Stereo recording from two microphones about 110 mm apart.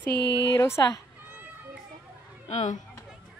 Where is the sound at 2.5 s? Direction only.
90° left.